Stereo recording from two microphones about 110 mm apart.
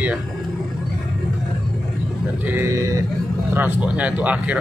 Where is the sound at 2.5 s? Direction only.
25° right (ahead or behind).